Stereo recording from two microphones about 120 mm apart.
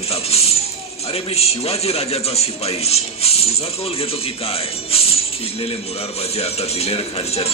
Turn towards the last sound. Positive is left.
turn(degrees=55)  # may be behind; listen again after turning